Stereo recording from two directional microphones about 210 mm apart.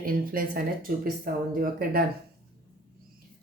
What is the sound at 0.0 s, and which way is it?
Speech, 45° right (ahead or behind).